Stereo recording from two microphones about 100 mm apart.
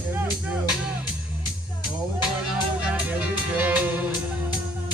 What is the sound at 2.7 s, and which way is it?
Music, 15° right (ahead or behind).